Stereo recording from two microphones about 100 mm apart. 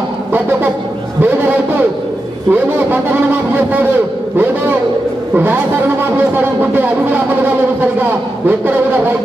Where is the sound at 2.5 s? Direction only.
20° right (ahead or behind).